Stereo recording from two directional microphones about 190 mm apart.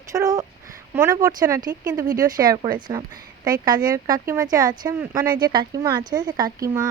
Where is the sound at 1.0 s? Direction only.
15° right (ahead or behind).